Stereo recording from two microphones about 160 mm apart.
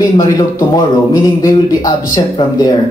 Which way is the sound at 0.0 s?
20° left (ahead or behind).